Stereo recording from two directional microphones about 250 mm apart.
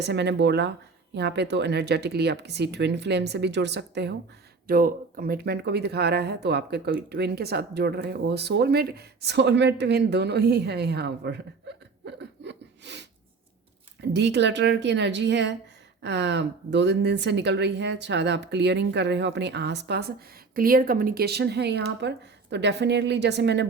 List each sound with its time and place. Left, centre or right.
0.0 s speech: right
12.0 s a sound: right
14.1 s speech: right